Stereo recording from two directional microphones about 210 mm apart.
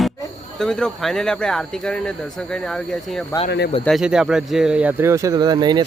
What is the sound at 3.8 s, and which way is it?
Speech, centre (ahead or behind).